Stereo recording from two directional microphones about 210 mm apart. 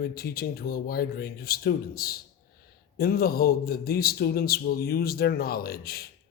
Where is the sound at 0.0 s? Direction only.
45° left (ahead or behind).